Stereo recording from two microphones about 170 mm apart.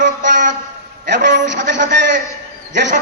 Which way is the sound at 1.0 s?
90° right.